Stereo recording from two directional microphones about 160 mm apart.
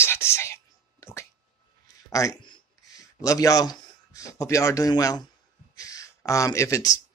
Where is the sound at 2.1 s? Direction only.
20° left (ahead or behind).